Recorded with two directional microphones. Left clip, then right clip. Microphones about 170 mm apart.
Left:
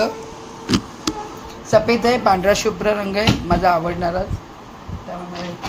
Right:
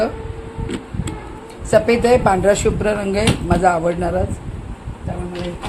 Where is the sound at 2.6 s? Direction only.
60° right (ahead or behind).